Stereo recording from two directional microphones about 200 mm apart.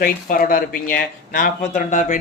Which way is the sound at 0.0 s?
45° left (ahead or behind).